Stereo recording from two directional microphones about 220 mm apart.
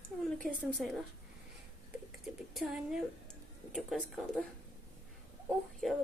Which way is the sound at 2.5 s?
Centre (ahead or behind).